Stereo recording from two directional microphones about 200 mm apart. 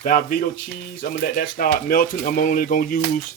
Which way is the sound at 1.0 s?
45° left (ahead or behind).